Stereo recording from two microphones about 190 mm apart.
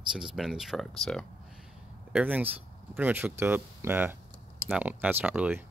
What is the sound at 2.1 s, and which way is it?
Speech, 10° right (ahead or behind).